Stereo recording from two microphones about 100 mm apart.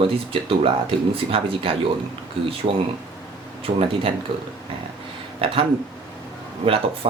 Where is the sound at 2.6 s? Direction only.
90° right.